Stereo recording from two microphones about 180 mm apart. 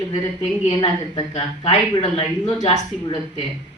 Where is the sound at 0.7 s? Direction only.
25° left (ahead or behind).